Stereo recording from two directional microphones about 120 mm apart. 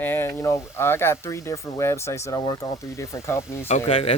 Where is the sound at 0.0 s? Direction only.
15° left (ahead or behind).